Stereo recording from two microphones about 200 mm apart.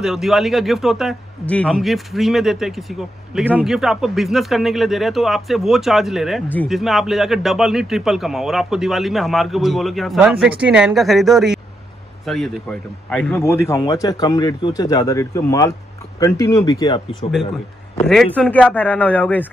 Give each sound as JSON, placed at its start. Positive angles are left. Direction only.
{"t": 0.0, "sound": "a man's voice", "side_deg": 0}
{"t": 18.0, "sound": "a man's voice", "side_deg": 0}